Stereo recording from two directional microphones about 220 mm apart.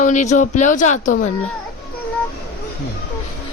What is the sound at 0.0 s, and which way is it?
Speech, 35° left (ahead or behind).